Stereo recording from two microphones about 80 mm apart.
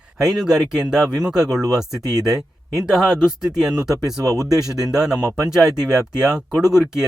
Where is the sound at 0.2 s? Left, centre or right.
Centre.